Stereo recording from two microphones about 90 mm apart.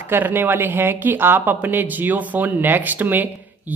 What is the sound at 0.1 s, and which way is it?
Speech, 25° right (ahead or behind).